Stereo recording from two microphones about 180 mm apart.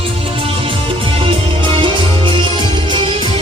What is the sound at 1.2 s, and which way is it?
Music, 30° right (ahead or behind).